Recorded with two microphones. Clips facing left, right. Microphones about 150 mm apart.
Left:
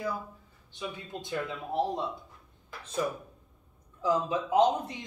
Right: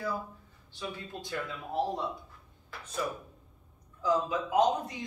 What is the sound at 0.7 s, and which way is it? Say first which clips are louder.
Speech: left 1 dB; 20° left (ahead or behind).